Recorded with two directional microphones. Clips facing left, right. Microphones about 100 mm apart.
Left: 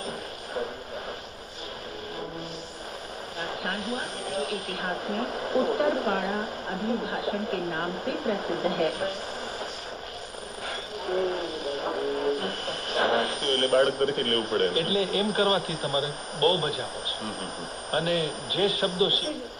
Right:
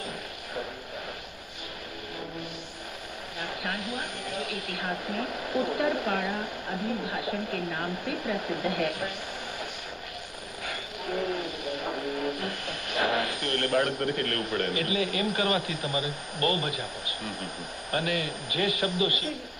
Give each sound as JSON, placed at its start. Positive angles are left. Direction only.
{"t": 3.3, "sound": "speech", "side_deg": 35}
{"t": 11.1, "sound": "a sound", "side_deg": 35}
{"t": 17.9, "sound": "speech", "side_deg": 35}